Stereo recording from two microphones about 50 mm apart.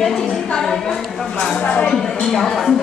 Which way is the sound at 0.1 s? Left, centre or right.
Centre.